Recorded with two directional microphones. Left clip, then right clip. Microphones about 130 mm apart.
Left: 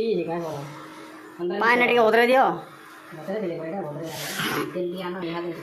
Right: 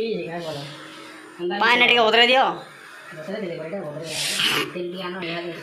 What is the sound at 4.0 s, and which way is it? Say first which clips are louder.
Speech: right 6 dB; 40° left (ahead or behind).